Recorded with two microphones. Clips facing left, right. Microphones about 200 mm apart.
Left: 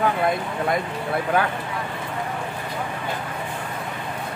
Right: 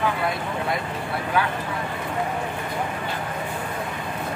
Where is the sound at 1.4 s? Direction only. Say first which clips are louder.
Left 1 dB; 50° left (ahead or behind).